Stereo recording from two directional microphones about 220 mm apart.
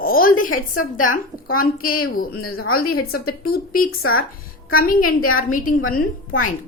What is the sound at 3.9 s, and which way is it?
Speech, 70° left (ahead or behind).